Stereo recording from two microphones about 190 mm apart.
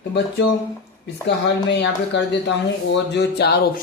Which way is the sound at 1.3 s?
65° left (ahead or behind).